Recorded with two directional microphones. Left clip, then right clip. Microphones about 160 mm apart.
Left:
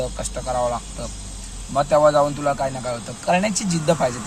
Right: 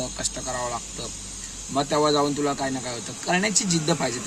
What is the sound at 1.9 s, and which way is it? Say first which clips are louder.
Speech: left 6 dB; 40° right (ahead or behind).